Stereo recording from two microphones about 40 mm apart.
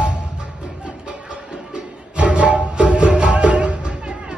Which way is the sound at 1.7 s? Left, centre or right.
Right.